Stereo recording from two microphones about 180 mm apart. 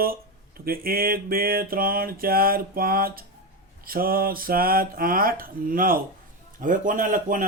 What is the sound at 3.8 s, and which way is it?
Mantra, 55° right (ahead or behind).